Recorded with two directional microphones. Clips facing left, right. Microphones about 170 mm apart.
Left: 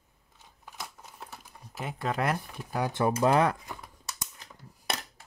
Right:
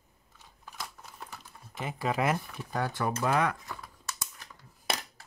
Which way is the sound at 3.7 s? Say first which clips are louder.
Even; 20° left (ahead or behind).